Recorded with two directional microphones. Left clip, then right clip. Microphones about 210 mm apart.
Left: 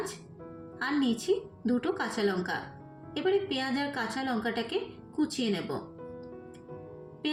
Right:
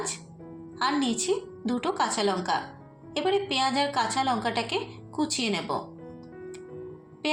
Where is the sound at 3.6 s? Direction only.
20° left (ahead or behind).